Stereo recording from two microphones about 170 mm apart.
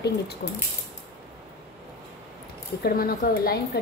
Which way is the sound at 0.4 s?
70° left (ahead or behind).